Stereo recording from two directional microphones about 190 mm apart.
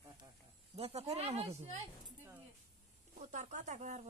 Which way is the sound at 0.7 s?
35° right (ahead or behind).